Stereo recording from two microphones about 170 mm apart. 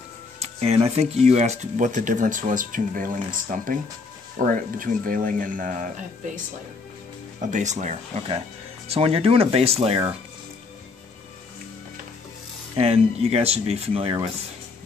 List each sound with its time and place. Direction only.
0.4 s speech: 40° right (ahead or behind)
12.7 s speech: 35° right (ahead or behind)